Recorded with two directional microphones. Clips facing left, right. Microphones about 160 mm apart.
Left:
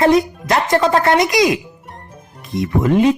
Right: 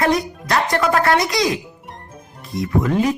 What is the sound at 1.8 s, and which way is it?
Music, centre (ahead or behind).